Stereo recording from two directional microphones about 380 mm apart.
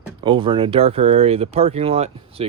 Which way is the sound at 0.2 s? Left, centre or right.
Centre.